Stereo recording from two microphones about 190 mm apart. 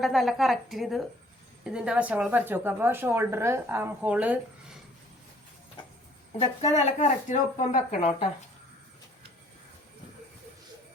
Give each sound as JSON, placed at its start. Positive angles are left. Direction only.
{"t": 0.0, "sound": "a woman's voice", "side_deg": 0}
{"t": 6.4, "sound": "speech", "side_deg": 35}